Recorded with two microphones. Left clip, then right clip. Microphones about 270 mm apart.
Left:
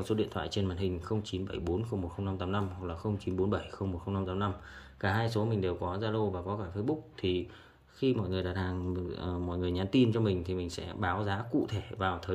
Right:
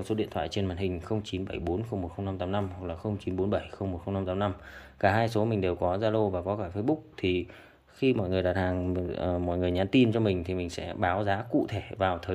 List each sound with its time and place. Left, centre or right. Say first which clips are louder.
0.0 s speech: right 2 dB; centre